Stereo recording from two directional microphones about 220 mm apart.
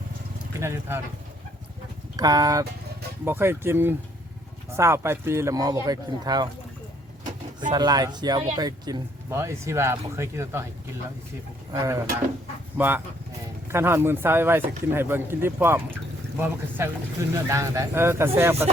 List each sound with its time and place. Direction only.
0.6 s speech: 10° right (ahead or behind)
2.1 s speech: 15° right (ahead or behind)
7.7 s speech: 20° right (ahead or behind)
11.7 s speech: 15° right (ahead or behind)